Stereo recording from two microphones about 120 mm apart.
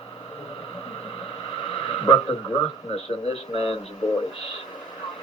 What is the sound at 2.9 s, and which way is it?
Speech, 55° left (ahead or behind).